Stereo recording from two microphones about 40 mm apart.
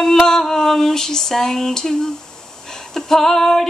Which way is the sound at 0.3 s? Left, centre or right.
Centre.